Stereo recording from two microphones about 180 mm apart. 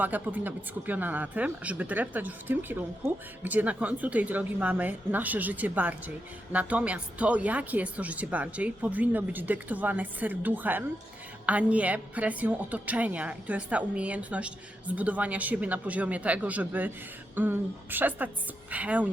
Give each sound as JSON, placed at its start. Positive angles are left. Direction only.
{"t": 0.0, "sound": "a woman's voice", "side_deg": -10}